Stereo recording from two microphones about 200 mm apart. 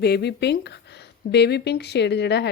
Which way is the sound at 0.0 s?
55° left (ahead or behind).